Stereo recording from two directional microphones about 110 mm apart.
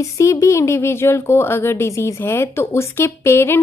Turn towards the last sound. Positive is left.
turn(degrees=20)  # may be behind; listen again after turning